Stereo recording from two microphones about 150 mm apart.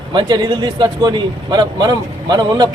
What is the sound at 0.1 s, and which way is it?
Speech, 30° right (ahead or behind).